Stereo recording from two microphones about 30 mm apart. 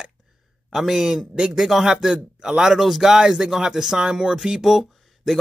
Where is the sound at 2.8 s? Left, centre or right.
Centre.